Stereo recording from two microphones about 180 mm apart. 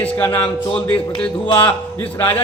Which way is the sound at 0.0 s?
10° left (ahead or behind).